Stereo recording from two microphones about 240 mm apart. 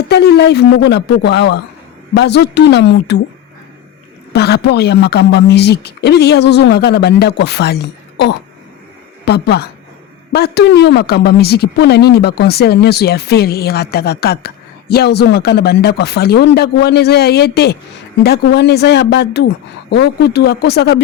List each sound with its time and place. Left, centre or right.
0.1 s speech: left
4.3 s speech: left